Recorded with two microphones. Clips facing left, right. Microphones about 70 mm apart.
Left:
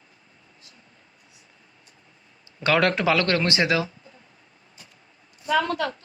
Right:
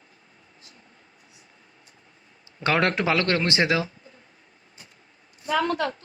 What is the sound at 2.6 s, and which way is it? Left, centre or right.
Speech, right.